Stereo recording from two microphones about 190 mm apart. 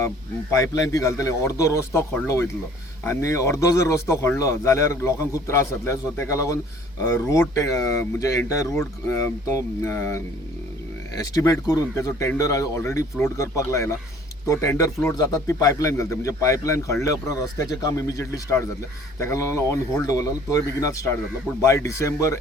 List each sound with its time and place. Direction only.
0.5 s a man's voice: 15° left (ahead or behind)
11.2 s a man's voice: 20° left (ahead or behind)